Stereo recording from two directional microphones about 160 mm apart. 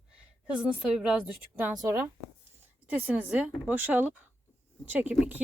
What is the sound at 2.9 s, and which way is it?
Speech, 10° right (ahead or behind).